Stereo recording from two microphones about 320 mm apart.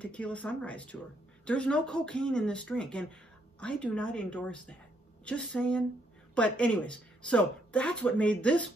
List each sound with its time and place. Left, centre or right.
0.0 s speech: centre